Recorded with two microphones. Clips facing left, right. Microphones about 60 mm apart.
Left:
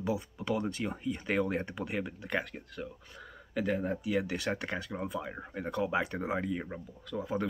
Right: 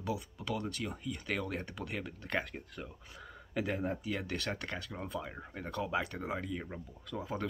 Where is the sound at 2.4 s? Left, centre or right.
Centre.